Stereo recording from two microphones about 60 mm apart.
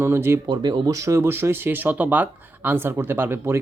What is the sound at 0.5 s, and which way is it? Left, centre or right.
Speech, right.